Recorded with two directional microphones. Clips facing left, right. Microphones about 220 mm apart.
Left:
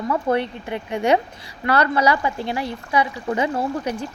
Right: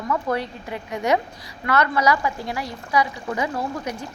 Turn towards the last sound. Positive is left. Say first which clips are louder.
# left 4 dB
turn(degrees=30)  # may be behind; listen again after turning